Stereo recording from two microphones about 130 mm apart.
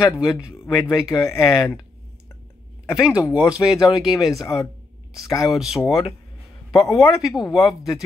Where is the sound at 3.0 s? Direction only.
5° right (ahead or behind).